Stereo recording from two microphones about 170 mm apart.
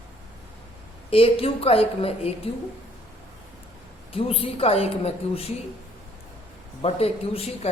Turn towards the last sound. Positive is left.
turn(degrees=35)  # may be behind; listen again after turning